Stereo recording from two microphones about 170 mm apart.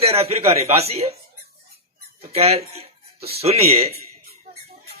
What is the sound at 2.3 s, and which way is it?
Speech, 35° right (ahead or behind).